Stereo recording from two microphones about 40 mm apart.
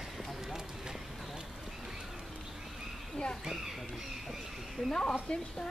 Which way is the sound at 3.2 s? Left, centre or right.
Left.